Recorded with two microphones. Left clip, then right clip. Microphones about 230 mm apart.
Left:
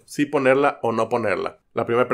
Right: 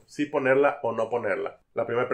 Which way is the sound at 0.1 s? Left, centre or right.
Left.